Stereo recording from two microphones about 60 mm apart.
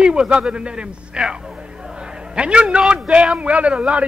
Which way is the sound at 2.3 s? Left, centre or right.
Centre.